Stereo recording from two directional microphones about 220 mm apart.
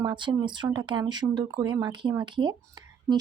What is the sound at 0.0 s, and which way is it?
A woman's voice, 20° right (ahead or behind).